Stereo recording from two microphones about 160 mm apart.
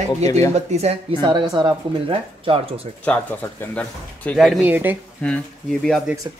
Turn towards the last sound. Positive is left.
turn(degrees=5)  # may be behind; listen again after turning